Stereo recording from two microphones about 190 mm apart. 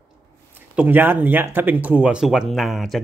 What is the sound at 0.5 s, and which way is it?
Speech, 10° right (ahead or behind).